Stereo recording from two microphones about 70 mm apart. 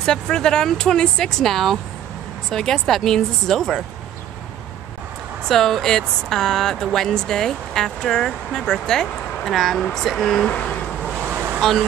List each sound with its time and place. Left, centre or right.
0.0 s speech: centre
5.5 s speech: centre
10.5 s vehicle: left
11.2 s vehicle: right